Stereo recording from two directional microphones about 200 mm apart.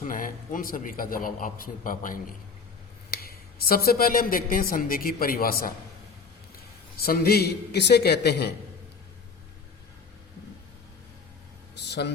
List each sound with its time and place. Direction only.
0.0 s a man's voice: 40° left (ahead or behind)
6.9 s a man's voice: 50° left (ahead or behind)
11.7 s a sound: 55° left (ahead or behind)